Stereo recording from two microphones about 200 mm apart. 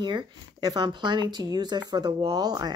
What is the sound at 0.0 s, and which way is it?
Speech, 20° right (ahead or behind).